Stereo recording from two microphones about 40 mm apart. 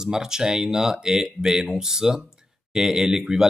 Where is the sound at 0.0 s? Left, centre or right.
Centre.